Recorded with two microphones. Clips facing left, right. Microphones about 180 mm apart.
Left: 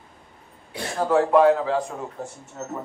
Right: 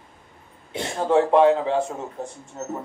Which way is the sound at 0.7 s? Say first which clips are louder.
Right 1 dB; 25° right (ahead or behind).